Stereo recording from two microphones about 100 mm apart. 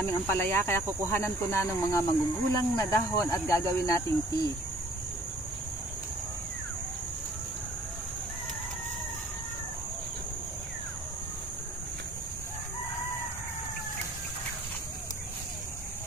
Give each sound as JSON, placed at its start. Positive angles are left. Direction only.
{"t": 0.0, "sound": "speech", "side_deg": 20}